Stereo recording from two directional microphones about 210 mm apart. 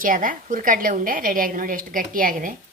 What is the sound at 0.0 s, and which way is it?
A woman's voice, 40° right (ahead or behind).